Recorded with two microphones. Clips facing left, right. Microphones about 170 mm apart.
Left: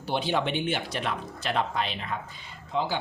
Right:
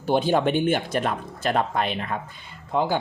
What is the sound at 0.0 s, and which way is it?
Speech, 45° right (ahead or behind).